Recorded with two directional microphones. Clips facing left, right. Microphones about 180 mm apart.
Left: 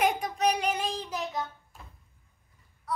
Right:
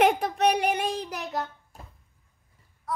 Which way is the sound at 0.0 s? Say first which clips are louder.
Right 5 dB; 65° right (ahead or behind).